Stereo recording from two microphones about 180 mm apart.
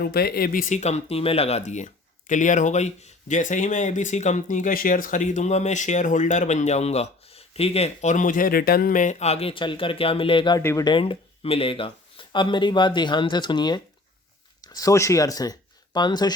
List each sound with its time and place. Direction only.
0.0 s speech: 60° left (ahead or behind); by 10.6 s 25° left (ahead or behind)
10.6 s speech: 15° left (ahead or behind)